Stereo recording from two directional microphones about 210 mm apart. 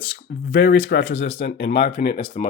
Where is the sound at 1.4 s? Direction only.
50° left (ahead or behind).